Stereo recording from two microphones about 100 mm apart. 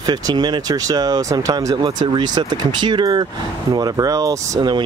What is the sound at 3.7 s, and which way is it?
Speech, 35° right (ahead or behind).